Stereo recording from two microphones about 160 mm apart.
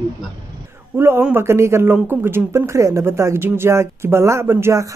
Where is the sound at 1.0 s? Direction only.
10° right (ahead or behind).